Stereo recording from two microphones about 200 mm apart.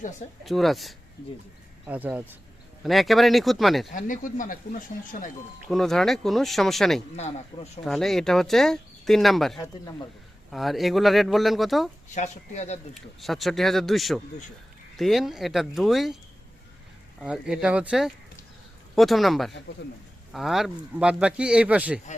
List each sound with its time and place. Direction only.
0.4 s speech: centre (ahead or behind)
3.9 s speech: 40° left (ahead or behind)
5.6 s speech: centre (ahead or behind)
7.2 s speech: 35° left (ahead or behind)
7.9 s speech: centre (ahead or behind)
12.1 s speech: 35° left (ahead or behind)
12.9 s speech: centre (ahead or behind)
17.2 s speech: centre (ahead or behind)